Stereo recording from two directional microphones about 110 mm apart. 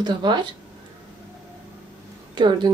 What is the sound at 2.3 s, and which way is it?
Speech, 45° right (ahead or behind).